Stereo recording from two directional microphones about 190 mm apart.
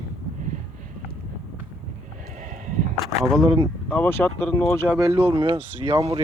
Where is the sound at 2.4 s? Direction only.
45° right (ahead or behind).